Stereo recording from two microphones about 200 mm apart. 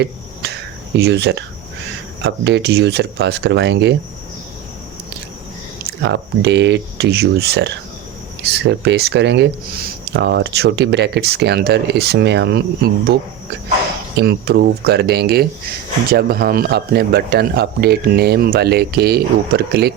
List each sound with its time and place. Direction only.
0.9 s speech: 55° right (ahead or behind)
6.0 s speech: 60° right (ahead or behind)
14.2 s speech: 55° right (ahead or behind)